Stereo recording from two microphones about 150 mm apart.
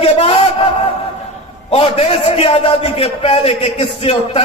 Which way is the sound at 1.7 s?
40° left (ahead or behind).